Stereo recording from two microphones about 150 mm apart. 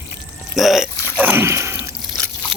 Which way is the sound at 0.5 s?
Centre (ahead or behind).